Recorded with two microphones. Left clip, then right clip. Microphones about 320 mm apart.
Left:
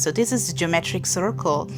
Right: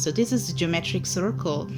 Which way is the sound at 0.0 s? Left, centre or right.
Left.